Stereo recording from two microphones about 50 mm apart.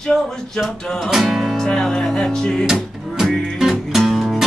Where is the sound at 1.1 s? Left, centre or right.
Centre.